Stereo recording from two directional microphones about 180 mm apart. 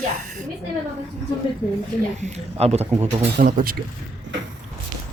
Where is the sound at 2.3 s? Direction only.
35° right (ahead or behind).